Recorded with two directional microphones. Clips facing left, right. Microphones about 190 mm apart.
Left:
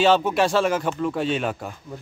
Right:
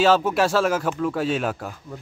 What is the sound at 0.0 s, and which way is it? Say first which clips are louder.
Speech: even; 5° right (ahead or behind).